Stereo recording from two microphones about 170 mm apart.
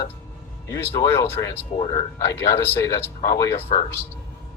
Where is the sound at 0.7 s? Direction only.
15° left (ahead or behind).